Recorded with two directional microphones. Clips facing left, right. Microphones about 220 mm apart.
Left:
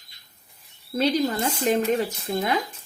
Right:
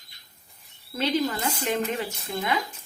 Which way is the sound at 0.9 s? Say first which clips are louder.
Left 3 dB; 40° left (ahead or behind).